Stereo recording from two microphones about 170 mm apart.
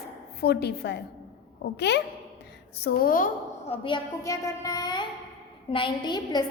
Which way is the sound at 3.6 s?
35° left (ahead or behind).